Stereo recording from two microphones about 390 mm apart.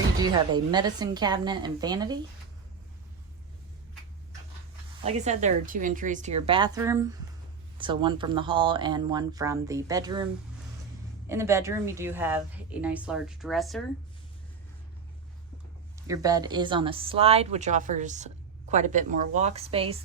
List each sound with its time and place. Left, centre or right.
0.2 s speech: centre
5.0 s speech: centre
11.3 s a woman's voice: centre
16.0 s speech: centre